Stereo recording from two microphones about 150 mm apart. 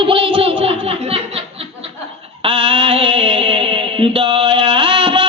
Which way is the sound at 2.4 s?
35° right (ahead or behind).